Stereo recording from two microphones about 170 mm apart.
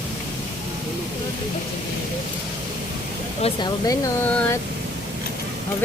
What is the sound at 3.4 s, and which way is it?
Speech, 25° left (ahead or behind).